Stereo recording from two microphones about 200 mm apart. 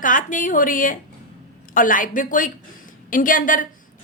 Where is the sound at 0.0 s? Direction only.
40° left (ahead or behind).